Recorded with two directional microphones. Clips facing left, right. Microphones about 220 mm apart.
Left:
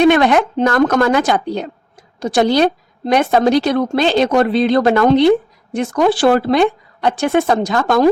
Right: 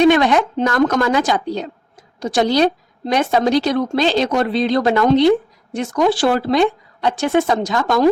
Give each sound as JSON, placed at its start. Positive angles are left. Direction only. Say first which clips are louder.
{"t": 0.0, "sound": "speech", "louder": "left 2 dB", "side_deg": 55}